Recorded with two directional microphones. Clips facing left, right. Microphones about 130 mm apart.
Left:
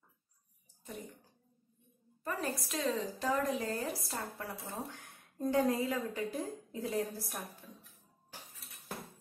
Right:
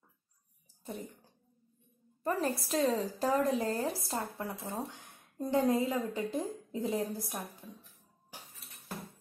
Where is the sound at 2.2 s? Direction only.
30° right (ahead or behind); by 7.3 s 15° right (ahead or behind).